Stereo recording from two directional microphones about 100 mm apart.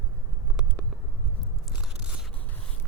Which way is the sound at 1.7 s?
10° right (ahead or behind).